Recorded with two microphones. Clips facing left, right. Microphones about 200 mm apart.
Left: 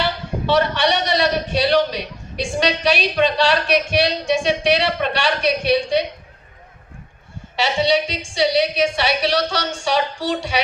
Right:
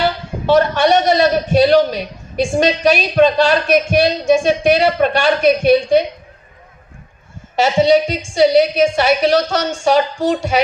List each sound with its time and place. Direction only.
0.0 s a man's voice: 45° right (ahead or behind)
7.5 s a man's voice: 45° right (ahead or behind)